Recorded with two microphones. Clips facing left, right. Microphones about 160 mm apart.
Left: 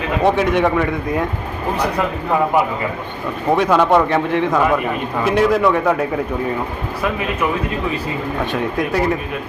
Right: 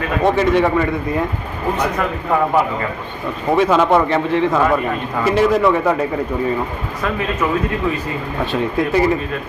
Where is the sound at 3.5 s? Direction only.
5° right (ahead or behind).